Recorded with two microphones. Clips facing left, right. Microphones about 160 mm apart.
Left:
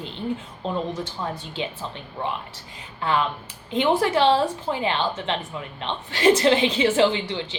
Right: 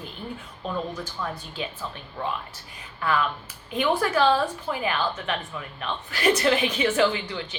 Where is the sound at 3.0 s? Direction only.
25° left (ahead or behind).